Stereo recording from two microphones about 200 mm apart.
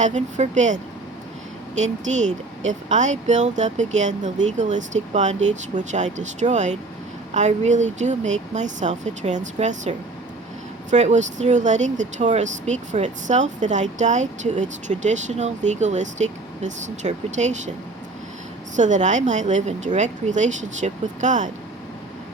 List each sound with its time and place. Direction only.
0.0 s speech: 35° right (ahead or behind)
10.9 s speech: 35° right (ahead or behind)
18.8 s speech: 35° right (ahead or behind)